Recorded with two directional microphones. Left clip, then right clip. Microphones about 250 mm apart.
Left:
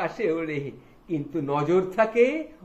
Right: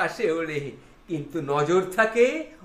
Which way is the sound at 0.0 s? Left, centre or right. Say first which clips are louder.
Right 2 dB; right.